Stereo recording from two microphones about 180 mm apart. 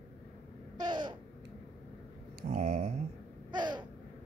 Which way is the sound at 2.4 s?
45° right (ahead or behind).